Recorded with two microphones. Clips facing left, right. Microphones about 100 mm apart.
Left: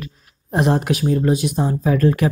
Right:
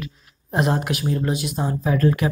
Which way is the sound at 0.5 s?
25° left (ahead or behind).